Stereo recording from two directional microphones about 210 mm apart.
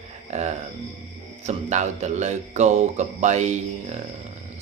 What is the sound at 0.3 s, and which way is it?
Speech, 35° right (ahead or behind).